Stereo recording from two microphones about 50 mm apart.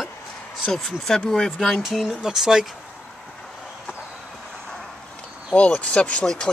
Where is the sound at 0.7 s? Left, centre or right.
Centre.